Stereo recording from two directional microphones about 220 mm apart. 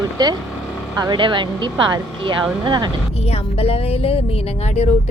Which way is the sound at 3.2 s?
30° left (ahead or behind).